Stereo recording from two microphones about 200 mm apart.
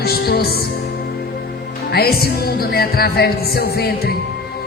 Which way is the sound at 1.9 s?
50° left (ahead or behind).